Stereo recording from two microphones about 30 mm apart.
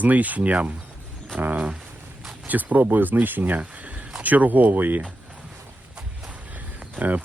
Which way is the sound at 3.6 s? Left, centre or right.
Right.